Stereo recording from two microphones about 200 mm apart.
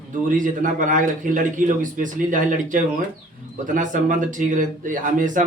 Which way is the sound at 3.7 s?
40° right (ahead or behind).